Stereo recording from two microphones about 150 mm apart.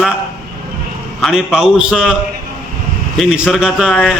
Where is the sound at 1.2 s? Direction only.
Centre (ahead or behind).